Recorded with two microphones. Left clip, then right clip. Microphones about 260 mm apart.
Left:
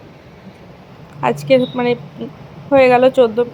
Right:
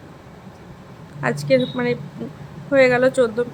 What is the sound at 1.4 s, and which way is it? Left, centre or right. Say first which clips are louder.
A woman's voice: left 4 dB; centre.